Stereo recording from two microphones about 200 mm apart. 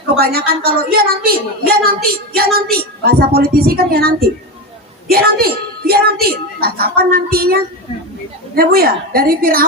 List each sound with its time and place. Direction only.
0.2 s a woman's voice: 50° right (ahead or behind)